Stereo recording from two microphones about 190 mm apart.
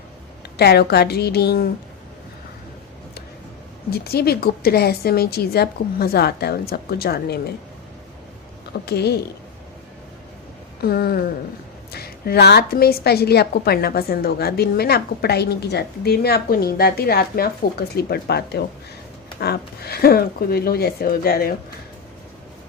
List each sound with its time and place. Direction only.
0.5 s a woman's voice: 60° left (ahead or behind)
4.0 s a woman's voice: 55° left (ahead or behind)
8.9 s a woman's voice: 60° left (ahead or behind)
10.8 s a sound: 55° left (ahead or behind)
11.9 s a woman's voice: 55° left (ahead or behind)